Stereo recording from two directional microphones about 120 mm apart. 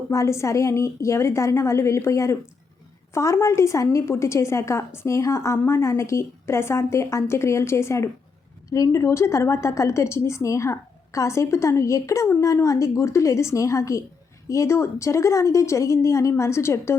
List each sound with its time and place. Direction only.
0.1 s a woman's voice: 25° left (ahead or behind)